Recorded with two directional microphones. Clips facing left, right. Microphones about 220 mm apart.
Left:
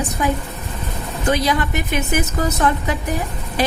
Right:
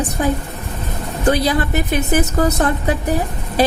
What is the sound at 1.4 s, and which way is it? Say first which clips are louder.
A woman's voice: right 2 dB; 35° right (ahead or behind).